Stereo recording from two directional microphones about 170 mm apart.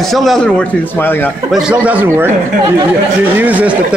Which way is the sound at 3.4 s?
10° right (ahead or behind).